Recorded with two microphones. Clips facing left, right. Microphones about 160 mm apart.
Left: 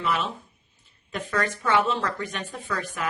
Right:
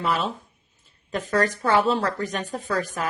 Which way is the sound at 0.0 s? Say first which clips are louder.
Right 2 dB; 40° right (ahead or behind).